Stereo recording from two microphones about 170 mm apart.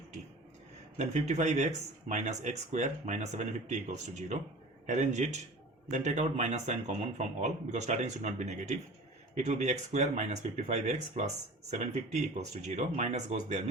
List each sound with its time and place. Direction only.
0.9 s speech: 40° right (ahead or behind)